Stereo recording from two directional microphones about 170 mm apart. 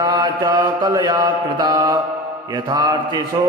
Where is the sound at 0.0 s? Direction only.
25° right (ahead or behind).